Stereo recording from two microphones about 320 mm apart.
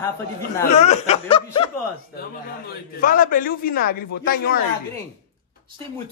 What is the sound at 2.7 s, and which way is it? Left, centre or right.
A man's voice, left.